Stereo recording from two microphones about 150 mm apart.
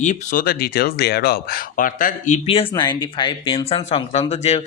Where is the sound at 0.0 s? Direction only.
55° left (ahead or behind).